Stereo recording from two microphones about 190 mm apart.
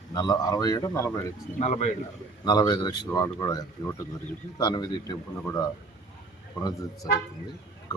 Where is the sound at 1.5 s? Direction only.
40° left (ahead or behind).